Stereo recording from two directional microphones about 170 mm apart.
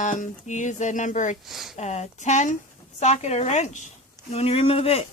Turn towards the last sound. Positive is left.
turn(degrees=35)  # may be behind; listen again after turning